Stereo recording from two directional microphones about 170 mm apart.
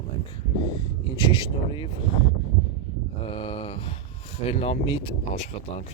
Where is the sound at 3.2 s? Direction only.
30° left (ahead or behind).